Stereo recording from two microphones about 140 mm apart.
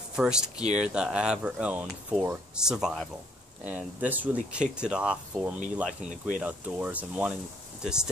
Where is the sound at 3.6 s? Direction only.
10° right (ahead or behind).